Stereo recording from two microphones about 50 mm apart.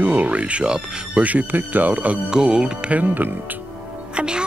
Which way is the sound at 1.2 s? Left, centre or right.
Right.